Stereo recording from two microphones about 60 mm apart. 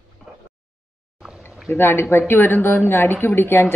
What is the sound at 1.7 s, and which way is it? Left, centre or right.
Speech, left.